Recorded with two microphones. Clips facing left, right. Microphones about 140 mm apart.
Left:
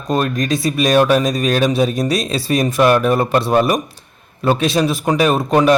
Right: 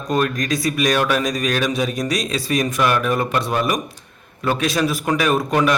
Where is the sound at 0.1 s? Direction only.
25° left (ahead or behind).